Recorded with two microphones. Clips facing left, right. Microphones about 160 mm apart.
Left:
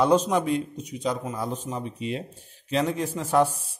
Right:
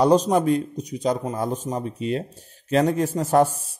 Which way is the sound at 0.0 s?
35° right (ahead or behind).